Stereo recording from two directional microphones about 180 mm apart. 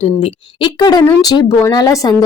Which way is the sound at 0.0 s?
30° left (ahead or behind).